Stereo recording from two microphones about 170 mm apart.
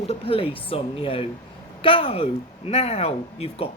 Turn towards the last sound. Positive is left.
turn(degrees=35)  # may be behind; listen again after turning